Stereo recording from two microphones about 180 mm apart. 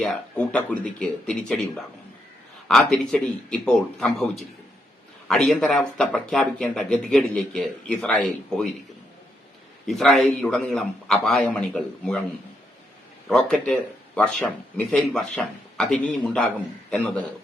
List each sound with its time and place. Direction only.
0.0 s speech: 5° left (ahead or behind)
9.8 s speech: centre (ahead or behind)
13.2 s speech: 5° left (ahead or behind)